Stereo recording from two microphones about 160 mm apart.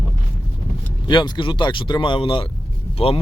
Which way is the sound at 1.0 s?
30° left (ahead or behind).